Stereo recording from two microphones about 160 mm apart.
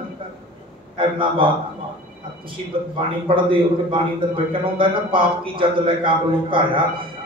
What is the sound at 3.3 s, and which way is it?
A man's voice, 35° right (ahead or behind).